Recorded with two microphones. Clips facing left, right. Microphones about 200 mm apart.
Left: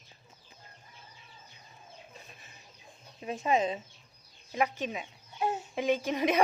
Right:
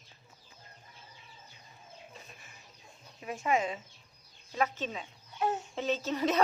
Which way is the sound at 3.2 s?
25° left (ahead or behind).